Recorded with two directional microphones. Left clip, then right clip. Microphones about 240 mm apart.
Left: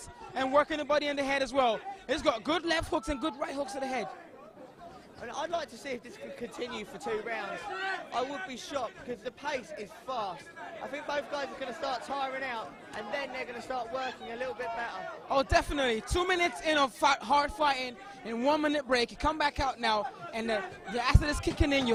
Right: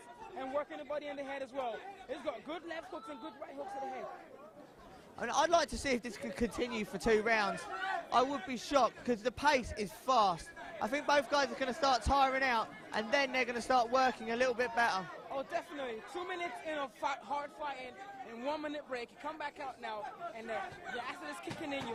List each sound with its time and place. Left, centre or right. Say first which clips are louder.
0.3 s a man's voice: left 12 dB; left
5.2 s a man's voice: right 5 dB; right
8.1 s a man's voice: right 2 dB; right
15.3 s a man's voice: left 14 dB; left